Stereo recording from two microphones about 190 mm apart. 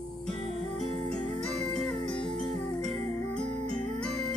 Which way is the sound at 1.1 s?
5° left (ahead or behind).